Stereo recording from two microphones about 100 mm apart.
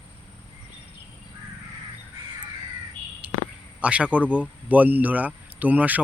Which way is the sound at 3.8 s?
10° right (ahead or behind).